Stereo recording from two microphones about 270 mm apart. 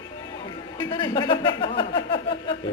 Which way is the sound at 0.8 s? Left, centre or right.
Centre.